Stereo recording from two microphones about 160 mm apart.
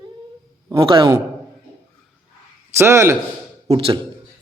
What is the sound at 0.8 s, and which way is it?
Speech, 30° right (ahead or behind).